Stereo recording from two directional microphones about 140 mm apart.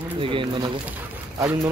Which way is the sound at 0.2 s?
40° right (ahead or behind).